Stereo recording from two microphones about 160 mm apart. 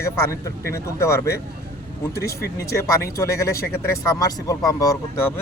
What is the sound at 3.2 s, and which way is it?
Speech, 20° left (ahead or behind).